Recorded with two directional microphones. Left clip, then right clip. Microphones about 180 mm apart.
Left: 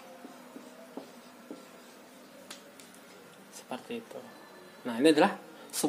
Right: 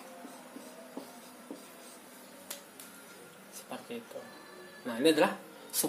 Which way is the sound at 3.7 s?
45° left (ahead or behind).